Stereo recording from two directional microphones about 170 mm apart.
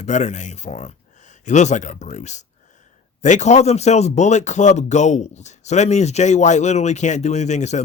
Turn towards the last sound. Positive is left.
turn(degrees=45)  # may be behind; listen again after turning